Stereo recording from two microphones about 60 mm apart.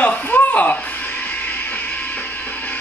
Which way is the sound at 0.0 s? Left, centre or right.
Left.